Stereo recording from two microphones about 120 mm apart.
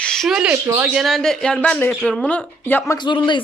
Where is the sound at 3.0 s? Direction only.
40° left (ahead or behind).